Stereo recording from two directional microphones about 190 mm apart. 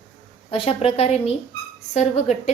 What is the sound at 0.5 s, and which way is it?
A woman's voice, 30° left (ahead or behind).